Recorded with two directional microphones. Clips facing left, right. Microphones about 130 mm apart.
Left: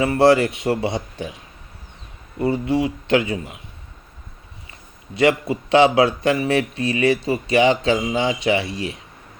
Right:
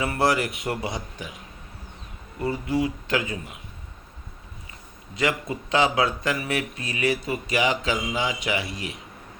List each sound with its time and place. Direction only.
0.0 s speech: 25° left (ahead or behind)
2.4 s speech: 25° left (ahead or behind)
5.1 s speech: 30° left (ahead or behind)